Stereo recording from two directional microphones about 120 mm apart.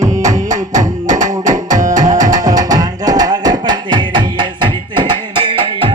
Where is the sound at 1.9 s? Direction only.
30° right (ahead or behind); by 5.9 s 45° right (ahead or behind).